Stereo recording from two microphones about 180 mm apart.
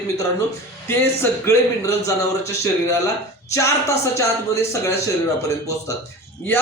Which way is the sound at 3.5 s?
15° left (ahead or behind).